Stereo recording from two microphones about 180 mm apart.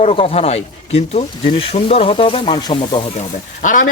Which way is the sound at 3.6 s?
45° left (ahead or behind).